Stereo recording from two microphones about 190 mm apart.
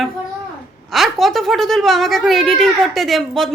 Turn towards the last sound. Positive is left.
turn(degrees=0)  # may be behind; listen again after turning